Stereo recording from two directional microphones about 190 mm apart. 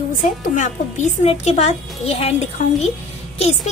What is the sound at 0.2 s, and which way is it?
Speech, 40° left (ahead or behind).